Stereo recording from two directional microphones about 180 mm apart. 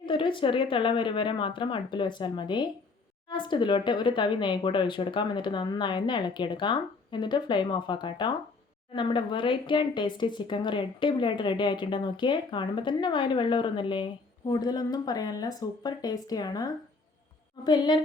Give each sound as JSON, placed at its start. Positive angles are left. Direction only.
{"t": 0.0, "sound": "speech", "side_deg": 25}